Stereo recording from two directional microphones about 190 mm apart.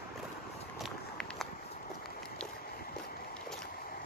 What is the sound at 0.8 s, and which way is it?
Walk, centre (ahead or behind).